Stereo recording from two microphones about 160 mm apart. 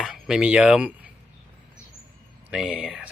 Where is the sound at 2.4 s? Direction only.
5° right (ahead or behind).